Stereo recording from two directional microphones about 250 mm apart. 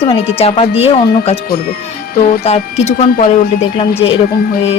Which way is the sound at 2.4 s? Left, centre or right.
Left.